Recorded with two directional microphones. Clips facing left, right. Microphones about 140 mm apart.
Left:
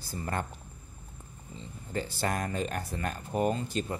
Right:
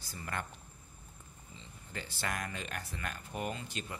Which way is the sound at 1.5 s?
40° left (ahead or behind).